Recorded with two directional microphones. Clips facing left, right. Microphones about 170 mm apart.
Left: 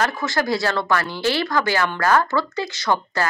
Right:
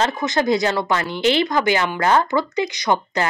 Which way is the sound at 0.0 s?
20° right (ahead or behind).